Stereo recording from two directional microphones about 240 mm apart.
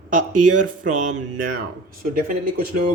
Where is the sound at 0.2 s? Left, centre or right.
Right.